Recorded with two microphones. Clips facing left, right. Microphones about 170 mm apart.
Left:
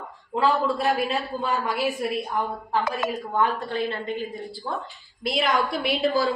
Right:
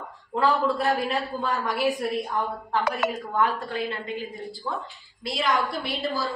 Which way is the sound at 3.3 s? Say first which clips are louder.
Left 4 dB; 25° left (ahead or behind).